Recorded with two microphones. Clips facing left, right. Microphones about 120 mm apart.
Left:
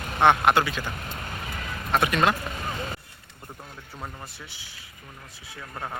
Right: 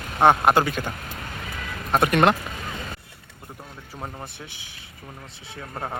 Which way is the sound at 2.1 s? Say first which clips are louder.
Right 6 dB; 60° right (ahead or behind).